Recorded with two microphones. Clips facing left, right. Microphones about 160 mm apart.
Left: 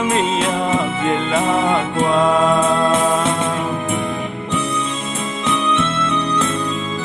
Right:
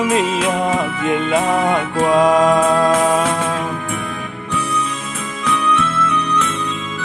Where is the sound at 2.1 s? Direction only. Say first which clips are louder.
Right 3 dB; 15° right (ahead or behind).